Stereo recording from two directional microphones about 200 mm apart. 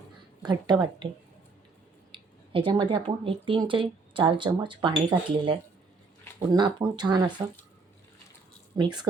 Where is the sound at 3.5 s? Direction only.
25° right (ahead or behind).